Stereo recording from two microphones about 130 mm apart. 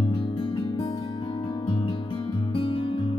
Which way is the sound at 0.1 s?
45° left (ahead or behind).